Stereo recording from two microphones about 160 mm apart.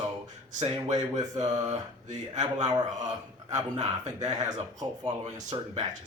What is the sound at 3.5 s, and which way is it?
Speech, 45° right (ahead or behind).